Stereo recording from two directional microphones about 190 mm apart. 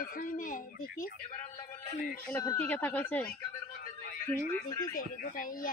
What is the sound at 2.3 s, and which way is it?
Speech, 10° left (ahead or behind).